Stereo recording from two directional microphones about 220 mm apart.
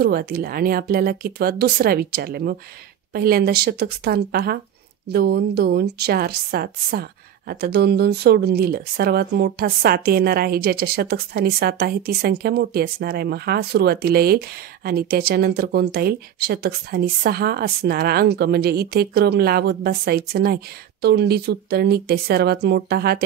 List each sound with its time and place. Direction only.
0.0 s speech: 45° right (ahead or behind)